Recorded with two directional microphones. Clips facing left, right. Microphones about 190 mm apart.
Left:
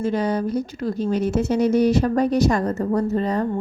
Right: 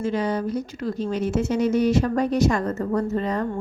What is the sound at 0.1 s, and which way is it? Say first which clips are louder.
A woman's voice: left 2 dB; 35° left (ahead or behind).